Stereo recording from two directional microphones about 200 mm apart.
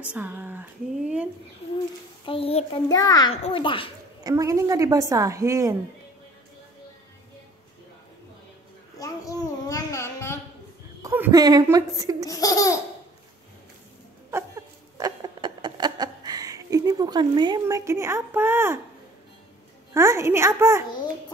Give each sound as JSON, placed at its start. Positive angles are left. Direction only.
{"t": 0.1, "sound": "a woman's voice", "side_deg": -10}
{"t": 2.2, "sound": "a child's voice", "side_deg": 30}
{"t": 4.2, "sound": "a woman's voice", "side_deg": -15}
{"t": 8.9, "sound": "a sound", "side_deg": 15}
{"t": 11.0, "sound": "a woman's voice", "side_deg": -10}
{"t": 12.3, "sound": "laughter", "side_deg": 15}
{"t": 14.3, "sound": "a woman's voice", "side_deg": -15}
{"t": 15.0, "sound": "a sound", "side_deg": -20}
{"t": 19.9, "sound": "a woman's voice", "side_deg": -15}